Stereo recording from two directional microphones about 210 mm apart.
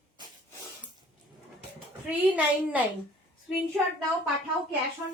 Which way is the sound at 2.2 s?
5° right (ahead or behind).